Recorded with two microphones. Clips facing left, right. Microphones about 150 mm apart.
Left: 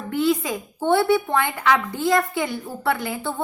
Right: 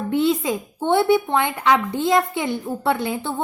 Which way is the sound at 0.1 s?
25° right (ahead or behind).